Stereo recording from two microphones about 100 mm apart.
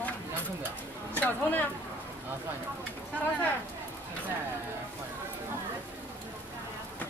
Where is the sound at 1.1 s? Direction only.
15° left (ahead or behind).